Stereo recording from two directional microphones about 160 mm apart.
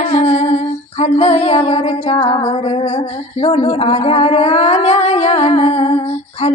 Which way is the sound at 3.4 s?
40° left (ahead or behind).